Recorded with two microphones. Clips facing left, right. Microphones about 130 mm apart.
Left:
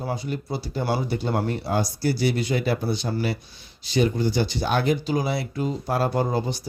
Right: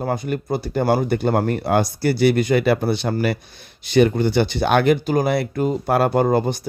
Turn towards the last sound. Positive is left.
turn(degrees=-55)  # may be behind; listen again after turning